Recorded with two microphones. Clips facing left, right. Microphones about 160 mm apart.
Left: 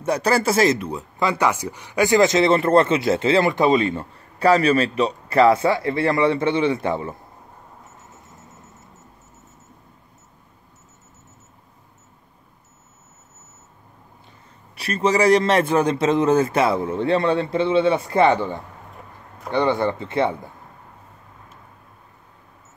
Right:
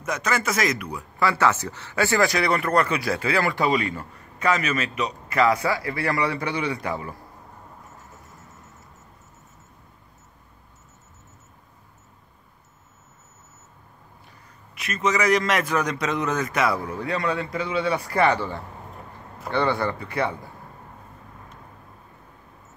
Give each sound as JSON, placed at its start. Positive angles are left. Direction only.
{"t": 0.0, "sound": "speech", "side_deg": 35}
{"t": 14.8, "sound": "speech", "side_deg": 35}